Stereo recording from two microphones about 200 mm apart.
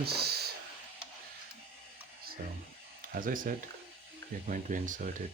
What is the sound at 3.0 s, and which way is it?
Speech, 45° right (ahead or behind).